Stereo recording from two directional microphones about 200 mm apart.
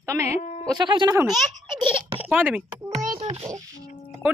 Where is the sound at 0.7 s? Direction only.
25° right (ahead or behind).